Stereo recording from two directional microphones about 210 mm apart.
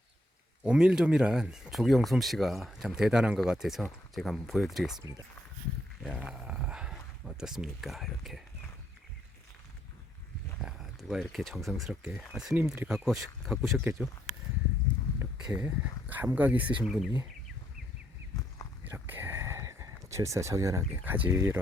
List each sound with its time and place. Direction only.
0.6 s speech: 5° right (ahead or behind)
4.9 s speech: 15° right (ahead or behind)
6.0 s speech: centre (ahead or behind)
10.6 s speech: centre (ahead or behind)
15.2 s speech: 10° right (ahead or behind)
18.9 s speech: 10° right (ahead or behind)